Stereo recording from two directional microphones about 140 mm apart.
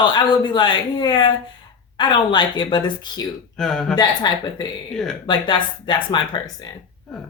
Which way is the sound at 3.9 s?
30° left (ahead or behind).